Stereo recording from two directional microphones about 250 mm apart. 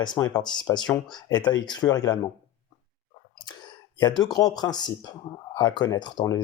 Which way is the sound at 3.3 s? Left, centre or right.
Centre.